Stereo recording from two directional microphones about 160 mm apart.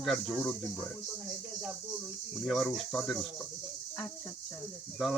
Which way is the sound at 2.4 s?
Centre (ahead or behind).